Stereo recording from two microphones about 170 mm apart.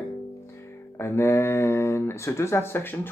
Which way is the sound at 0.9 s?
15° left (ahead or behind).